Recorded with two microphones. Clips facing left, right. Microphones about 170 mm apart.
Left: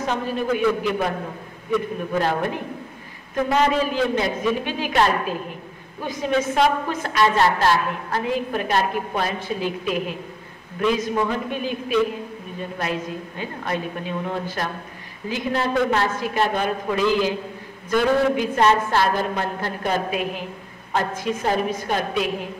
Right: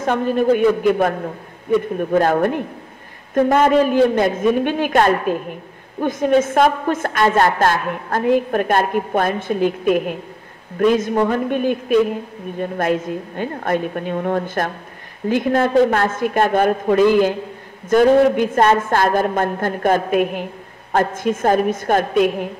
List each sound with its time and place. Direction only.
0.0 s a woman's voice: 55° right (ahead or behind)